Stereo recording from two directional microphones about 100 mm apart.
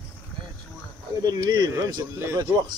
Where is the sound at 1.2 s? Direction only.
40° right (ahead or behind).